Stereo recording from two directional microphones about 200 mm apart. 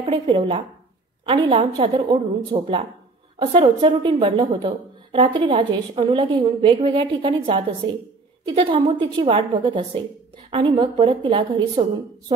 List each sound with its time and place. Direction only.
0.0 s a woman's voice: 25° right (ahead or behind)